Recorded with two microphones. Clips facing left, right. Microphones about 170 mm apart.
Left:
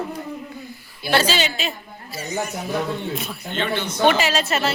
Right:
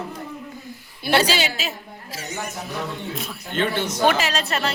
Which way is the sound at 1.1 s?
10° right (ahead or behind).